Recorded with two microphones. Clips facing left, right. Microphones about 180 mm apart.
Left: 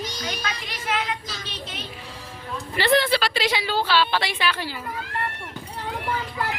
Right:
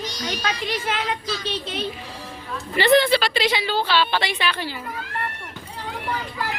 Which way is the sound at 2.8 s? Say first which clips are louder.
Right 4 dB; centre (ahead or behind).